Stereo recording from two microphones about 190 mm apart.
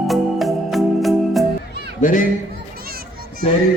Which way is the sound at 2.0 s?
45° left (ahead or behind).